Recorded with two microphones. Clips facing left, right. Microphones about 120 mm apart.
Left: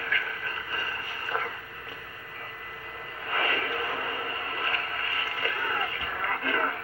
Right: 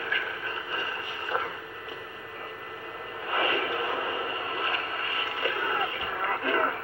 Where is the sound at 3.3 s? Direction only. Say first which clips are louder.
Right 2 dB; 20° right (ahead or behind).